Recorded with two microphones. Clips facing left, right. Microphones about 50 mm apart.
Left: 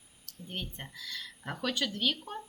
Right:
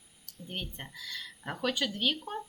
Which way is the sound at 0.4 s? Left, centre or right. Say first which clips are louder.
Right 1 dB; centre.